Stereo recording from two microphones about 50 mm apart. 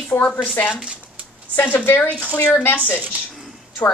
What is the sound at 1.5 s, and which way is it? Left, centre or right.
Speech, left.